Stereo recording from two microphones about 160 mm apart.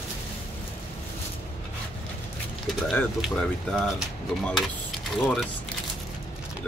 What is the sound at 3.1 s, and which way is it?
Speech, 5° left (ahead or behind).